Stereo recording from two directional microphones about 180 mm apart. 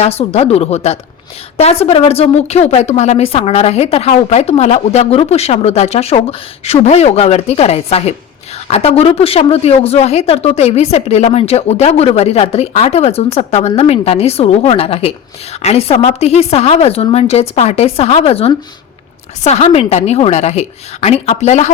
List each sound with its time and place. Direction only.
0.0 s a woman's voice: 35° left (ahead or behind)